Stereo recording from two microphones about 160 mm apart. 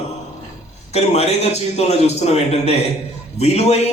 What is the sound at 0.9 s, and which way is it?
A man's voice, 40° left (ahead or behind).